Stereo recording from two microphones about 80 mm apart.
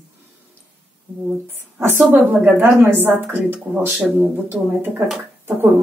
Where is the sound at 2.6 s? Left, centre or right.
Right.